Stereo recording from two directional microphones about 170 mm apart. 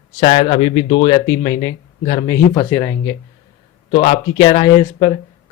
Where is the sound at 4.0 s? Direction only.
40° left (ahead or behind).